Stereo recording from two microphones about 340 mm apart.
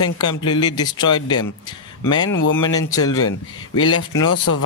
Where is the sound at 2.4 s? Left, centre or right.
Left.